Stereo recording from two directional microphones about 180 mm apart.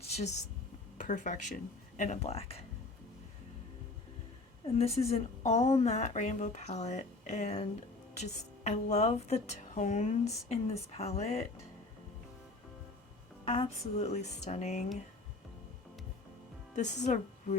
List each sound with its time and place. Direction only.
0.0 s a sound: 40° left (ahead or behind)
0.9 s speech: 45° left (ahead or behind)
4.6 s speech: 35° left (ahead or behind)
13.4 s speech: 35° left (ahead or behind)
16.7 s speech: 40° left (ahead or behind)